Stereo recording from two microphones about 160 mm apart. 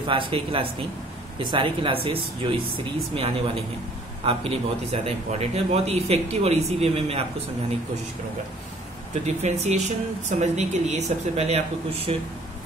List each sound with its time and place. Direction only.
0.0 s a man's voice: 30° right (ahead or behind)
9.2 s speech: 45° right (ahead or behind)